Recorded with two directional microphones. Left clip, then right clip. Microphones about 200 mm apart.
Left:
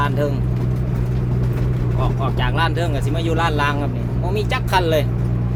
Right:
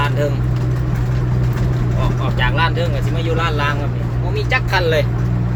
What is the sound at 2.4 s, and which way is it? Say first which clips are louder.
Speech: right 4 dB; 30° left (ahead or behind).